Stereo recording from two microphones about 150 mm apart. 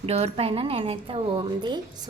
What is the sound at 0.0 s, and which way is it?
A woman's voice, 45° right (ahead or behind).